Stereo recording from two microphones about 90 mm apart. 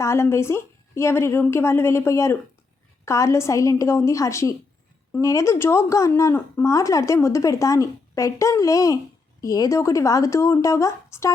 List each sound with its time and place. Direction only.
0.0 s a woman's voice: 30° left (ahead or behind)